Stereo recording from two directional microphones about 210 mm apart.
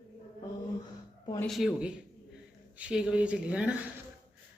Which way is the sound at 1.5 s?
Centre (ahead or behind).